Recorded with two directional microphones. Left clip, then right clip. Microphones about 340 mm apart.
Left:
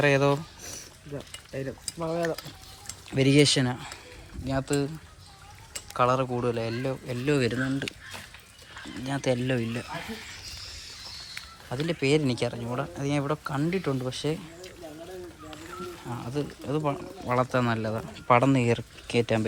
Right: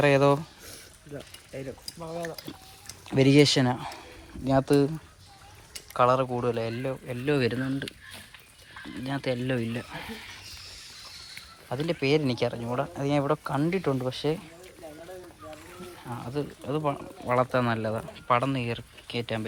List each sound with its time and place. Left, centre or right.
0.0 s speech: centre
2.0 s stir: left
3.1 s speech: centre
5.9 s speech: centre
9.0 s speech: centre
11.7 s speech: centre
16.0 s speech: centre